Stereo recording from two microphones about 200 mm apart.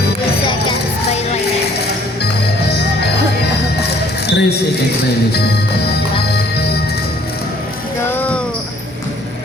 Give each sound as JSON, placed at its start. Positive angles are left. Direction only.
{"t": 3.8, "sound": "music", "side_deg": 55}
{"t": 6.3, "sound": "music", "side_deg": 55}
{"t": 8.0, "sound": "a sound", "side_deg": 10}